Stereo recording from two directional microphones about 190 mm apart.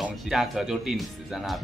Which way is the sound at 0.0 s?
Centre (ahead or behind).